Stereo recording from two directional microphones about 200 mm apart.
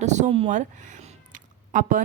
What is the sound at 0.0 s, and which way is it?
Speech, 35° right (ahead or behind).